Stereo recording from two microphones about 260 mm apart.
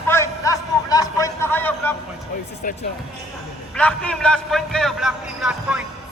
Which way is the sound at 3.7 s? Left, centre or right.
Centre.